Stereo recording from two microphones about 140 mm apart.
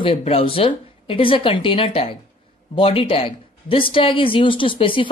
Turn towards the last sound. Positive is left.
turn(degrees=40)  # may be behind; listen again after turning